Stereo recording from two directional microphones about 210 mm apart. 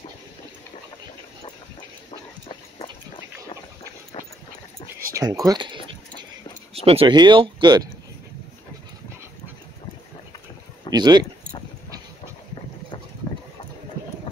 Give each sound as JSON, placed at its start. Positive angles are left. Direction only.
{"t": 2.0, "sound": "a sound", "side_deg": 25}
{"t": 5.1, "sound": "speech", "side_deg": -15}
{"t": 10.9, "sound": "speech", "side_deg": -20}